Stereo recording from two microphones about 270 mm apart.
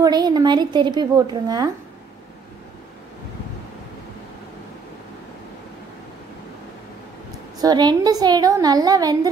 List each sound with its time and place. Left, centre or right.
0.0 s a woman's voice: centre
7.5 s a woman's voice: centre